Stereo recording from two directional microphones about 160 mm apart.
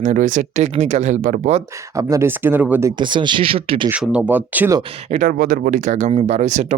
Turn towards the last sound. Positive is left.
turn(degrees=-45)  # may be behind; listen again after turning